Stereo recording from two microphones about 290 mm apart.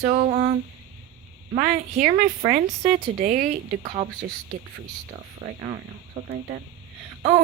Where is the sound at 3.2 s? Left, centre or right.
Right.